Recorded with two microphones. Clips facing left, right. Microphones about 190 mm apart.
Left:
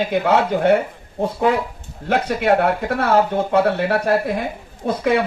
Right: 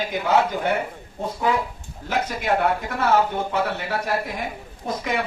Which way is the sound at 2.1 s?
60° left (ahead or behind).